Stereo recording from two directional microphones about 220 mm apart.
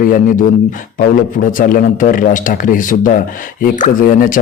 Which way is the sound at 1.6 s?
40° left (ahead or behind).